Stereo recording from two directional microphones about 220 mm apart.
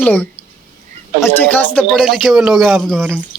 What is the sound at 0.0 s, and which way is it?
A man's voice, 10° left (ahead or behind).